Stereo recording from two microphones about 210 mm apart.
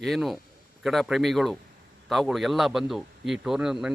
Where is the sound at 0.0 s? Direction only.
Centre (ahead or behind).